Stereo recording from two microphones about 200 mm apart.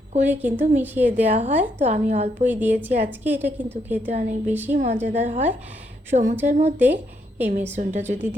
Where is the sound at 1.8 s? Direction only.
35° right (ahead or behind).